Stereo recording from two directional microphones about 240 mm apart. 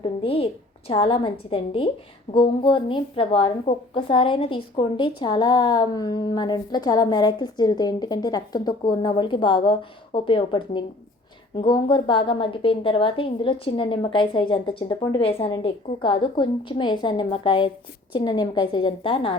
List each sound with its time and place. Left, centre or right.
0.0 s a woman's voice: left